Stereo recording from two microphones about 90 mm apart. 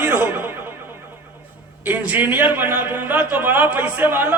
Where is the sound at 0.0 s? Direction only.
20° right (ahead or behind).